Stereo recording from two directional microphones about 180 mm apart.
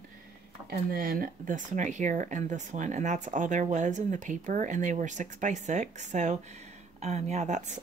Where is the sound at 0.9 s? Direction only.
55° right (ahead or behind).